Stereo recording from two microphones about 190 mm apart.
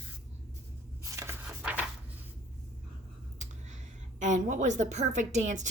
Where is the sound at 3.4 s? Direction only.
40° right (ahead or behind).